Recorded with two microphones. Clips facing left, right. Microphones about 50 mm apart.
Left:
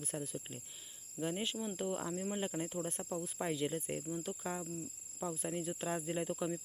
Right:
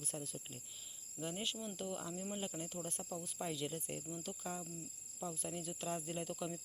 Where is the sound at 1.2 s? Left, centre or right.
Left.